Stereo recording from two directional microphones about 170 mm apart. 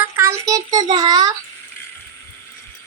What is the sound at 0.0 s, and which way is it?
Child singing, 15° right (ahead or behind).